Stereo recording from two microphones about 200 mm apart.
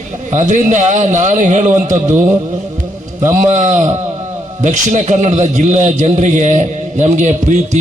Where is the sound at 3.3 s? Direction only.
40° right (ahead or behind).